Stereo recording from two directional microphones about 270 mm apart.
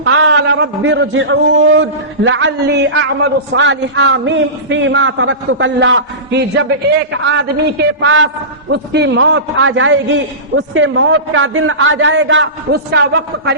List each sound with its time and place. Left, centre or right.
0.0 s a man's voice: right